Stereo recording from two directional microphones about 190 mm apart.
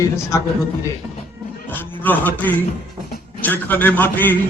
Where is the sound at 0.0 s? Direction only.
15° left (ahead or behind).